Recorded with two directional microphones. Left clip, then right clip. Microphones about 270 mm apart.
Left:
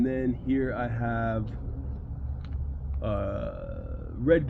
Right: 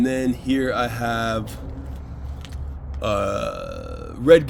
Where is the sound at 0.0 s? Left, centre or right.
Right.